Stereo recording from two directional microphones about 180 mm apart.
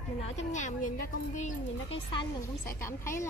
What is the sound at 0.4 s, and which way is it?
A woman's voice, 40° left (ahead or behind).